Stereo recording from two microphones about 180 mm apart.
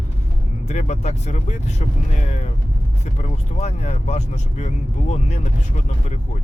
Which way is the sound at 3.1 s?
40° left (ahead or behind).